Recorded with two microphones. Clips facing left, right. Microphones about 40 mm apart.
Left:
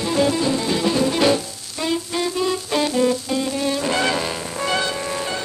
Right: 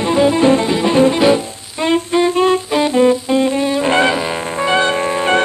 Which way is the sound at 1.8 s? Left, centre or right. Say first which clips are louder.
Right 9 dB; right.